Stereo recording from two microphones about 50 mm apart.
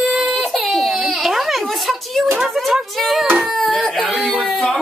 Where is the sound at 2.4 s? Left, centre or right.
Centre.